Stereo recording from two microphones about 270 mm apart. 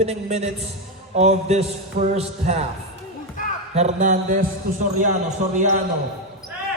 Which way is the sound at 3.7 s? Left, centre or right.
Right.